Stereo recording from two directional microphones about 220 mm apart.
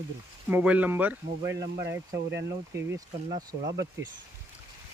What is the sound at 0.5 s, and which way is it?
Speech, 5° right (ahead or behind).